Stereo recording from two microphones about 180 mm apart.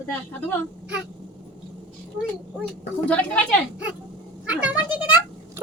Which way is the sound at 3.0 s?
5° left (ahead or behind).